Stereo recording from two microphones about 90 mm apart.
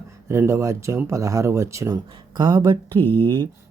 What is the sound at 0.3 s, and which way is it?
Speech, 30° right (ahead or behind).